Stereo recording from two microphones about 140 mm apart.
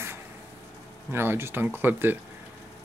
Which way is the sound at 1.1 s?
15° right (ahead or behind).